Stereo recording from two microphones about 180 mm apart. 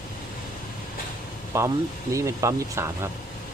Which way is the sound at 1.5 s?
15° right (ahead or behind).